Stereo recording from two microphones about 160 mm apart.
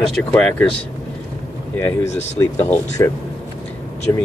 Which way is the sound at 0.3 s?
10° left (ahead or behind).